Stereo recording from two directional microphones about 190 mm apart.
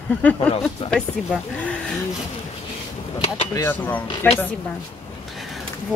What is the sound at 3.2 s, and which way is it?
Speech, 35° left (ahead or behind).